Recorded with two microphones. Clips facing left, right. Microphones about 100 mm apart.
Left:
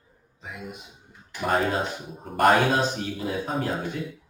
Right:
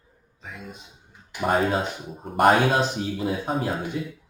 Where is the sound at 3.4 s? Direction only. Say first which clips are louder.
Right 2 dB; 5° right (ahead or behind).